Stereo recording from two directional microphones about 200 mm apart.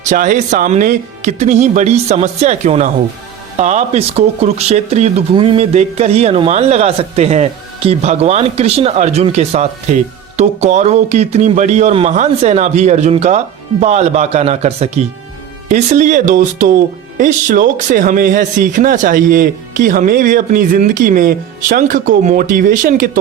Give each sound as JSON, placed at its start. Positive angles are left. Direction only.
{"t": 0.1, "sound": "speech", "side_deg": -40}